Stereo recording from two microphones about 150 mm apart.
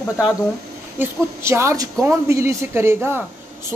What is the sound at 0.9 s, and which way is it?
Speech, 15° right (ahead or behind).